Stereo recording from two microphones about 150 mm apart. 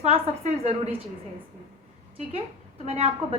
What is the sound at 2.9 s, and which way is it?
Speech, 40° right (ahead or behind).